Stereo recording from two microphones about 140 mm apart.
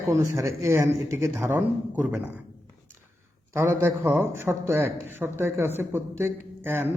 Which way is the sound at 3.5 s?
20° right (ahead or behind).